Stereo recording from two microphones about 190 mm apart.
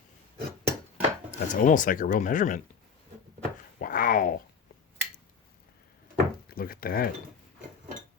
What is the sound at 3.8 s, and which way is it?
Speech, 45° left (ahead or behind).